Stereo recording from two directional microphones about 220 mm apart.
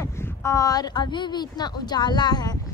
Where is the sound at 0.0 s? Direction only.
10° left (ahead or behind).